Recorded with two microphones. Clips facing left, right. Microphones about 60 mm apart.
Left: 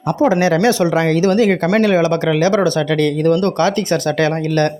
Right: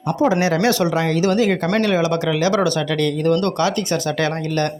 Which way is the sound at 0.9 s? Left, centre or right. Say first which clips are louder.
Left 4 dB; left.